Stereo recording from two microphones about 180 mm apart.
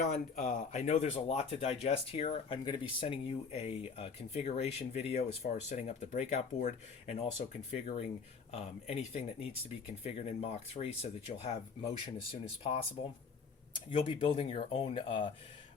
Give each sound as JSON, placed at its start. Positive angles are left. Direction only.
{"t": 0.3, "sound": "speech", "side_deg": 40}
{"t": 13.9, "sound": "speech", "side_deg": 30}